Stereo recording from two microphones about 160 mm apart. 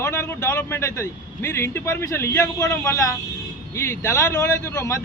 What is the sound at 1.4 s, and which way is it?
Speech, 15° left (ahead or behind).